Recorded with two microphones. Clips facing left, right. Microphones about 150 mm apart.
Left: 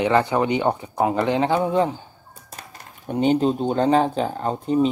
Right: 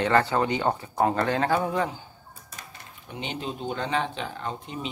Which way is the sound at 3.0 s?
45° left (ahead or behind).